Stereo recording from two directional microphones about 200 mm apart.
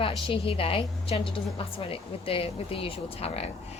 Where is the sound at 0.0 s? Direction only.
25° left (ahead or behind).